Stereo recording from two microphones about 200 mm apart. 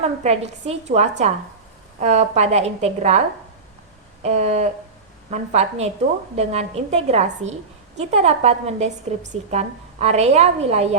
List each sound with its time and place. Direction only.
0.0 s a woman's voice: 35° right (ahead or behind)